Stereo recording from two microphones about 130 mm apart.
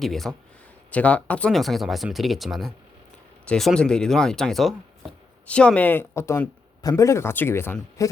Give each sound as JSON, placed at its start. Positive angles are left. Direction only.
{"t": 0.0, "sound": "speech", "side_deg": 0}